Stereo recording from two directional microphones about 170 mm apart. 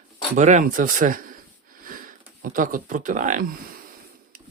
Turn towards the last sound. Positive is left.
turn(degrees=-55)  # may be behind; listen again after turning